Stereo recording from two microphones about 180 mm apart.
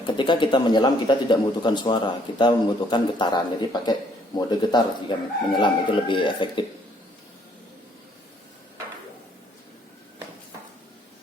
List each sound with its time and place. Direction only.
0.2 s speech: 25° left (ahead or behind)